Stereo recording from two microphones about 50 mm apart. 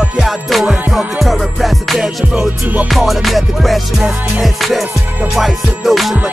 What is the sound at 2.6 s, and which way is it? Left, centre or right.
Music, right.